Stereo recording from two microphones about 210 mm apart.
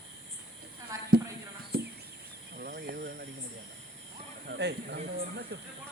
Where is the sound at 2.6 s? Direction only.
45° right (ahead or behind).